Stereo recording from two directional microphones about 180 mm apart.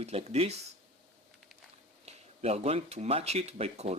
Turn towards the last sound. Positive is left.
turn(degrees=-35)  # may be behind; listen again after turning